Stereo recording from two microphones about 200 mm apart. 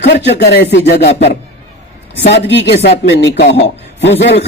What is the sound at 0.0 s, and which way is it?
Speech, 60° left (ahead or behind).